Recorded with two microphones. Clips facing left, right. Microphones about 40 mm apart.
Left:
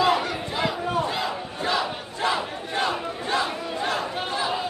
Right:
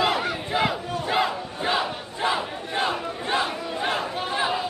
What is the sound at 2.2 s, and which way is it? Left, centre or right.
Battle cry, centre.